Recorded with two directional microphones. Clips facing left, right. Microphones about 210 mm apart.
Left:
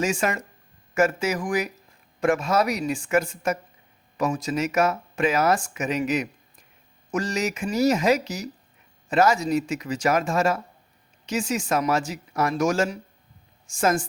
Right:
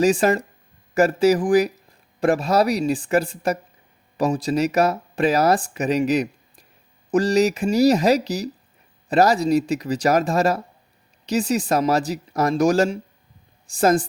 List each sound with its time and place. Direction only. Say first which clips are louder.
0.0 s speech: right 7 dB; 35° right (ahead or behind)